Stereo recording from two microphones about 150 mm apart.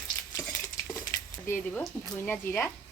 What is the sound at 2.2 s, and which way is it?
Speech, 15° left (ahead or behind).